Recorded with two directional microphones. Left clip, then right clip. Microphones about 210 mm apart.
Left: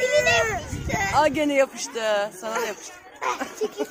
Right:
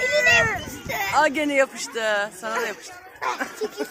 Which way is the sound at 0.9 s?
40° right (ahead or behind).